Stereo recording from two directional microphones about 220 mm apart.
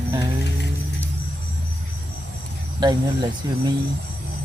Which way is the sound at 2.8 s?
20° right (ahead or behind).